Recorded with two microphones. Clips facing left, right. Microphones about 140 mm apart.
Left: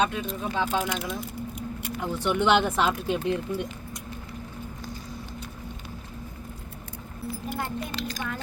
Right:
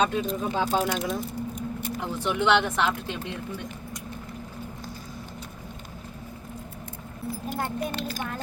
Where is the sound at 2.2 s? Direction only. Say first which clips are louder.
Left 1 dB; centre (ahead or behind).